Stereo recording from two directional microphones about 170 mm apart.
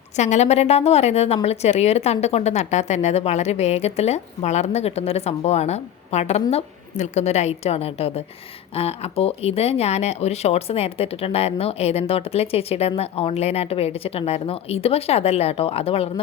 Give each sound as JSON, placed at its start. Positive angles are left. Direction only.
{"t": 0.2, "sound": "a woman's voice", "side_deg": 45}